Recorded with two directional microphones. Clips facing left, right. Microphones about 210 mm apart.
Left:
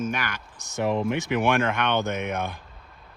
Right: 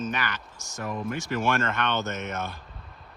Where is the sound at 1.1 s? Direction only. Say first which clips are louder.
Left 4 dB; 20° left (ahead or behind).